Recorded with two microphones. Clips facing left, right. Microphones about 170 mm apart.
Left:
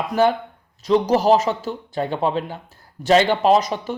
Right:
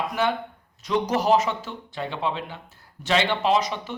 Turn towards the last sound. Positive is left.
turn(degrees=40)  # may be behind; listen again after turning